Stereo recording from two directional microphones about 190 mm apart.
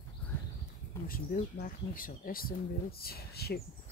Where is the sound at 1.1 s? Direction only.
45° left (ahead or behind).